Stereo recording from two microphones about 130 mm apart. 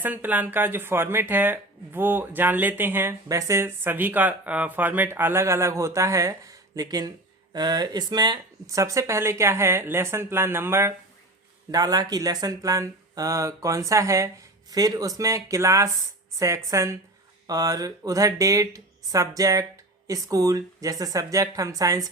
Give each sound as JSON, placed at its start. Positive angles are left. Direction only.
{"t": 0.0, "sound": "speech", "side_deg": -15}
{"t": 11.7, "sound": "speech", "side_deg": -30}